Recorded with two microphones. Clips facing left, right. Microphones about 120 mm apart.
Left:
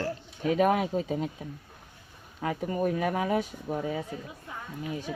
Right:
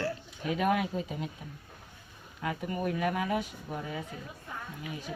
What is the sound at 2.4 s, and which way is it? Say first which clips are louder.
A man's voice: left 4 dB; 30° left (ahead or behind).